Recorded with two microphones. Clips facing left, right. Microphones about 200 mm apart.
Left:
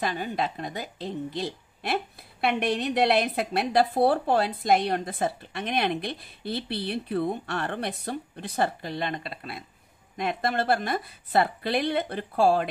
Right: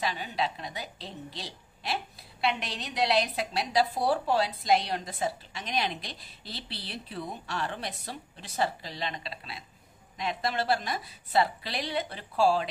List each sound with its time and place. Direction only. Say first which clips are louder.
0.0 s a woman's voice: left 3 dB; 50° left (ahead or behind)